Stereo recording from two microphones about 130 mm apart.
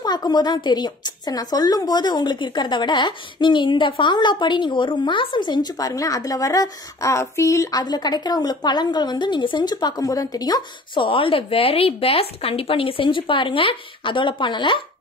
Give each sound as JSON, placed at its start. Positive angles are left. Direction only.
{"t": 0.0, "sound": "a woman's voice", "side_deg": 30}